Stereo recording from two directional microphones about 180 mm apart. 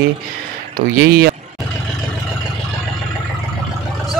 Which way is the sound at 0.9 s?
55° right (ahead or behind).